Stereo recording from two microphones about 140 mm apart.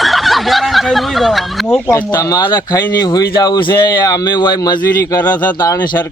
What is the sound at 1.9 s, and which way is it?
Speech, 20° left (ahead or behind).